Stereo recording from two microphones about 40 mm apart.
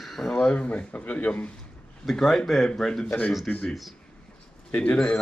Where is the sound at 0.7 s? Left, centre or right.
Left.